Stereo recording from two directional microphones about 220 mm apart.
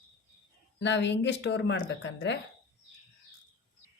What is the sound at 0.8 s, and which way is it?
Speech, 55° left (ahead or behind).